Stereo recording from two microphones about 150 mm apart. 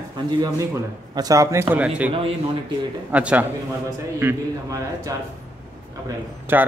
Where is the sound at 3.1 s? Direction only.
10° right (ahead or behind).